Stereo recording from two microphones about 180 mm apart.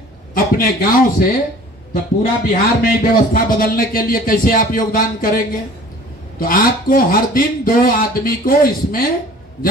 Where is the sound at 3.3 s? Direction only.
55° left (ahead or behind).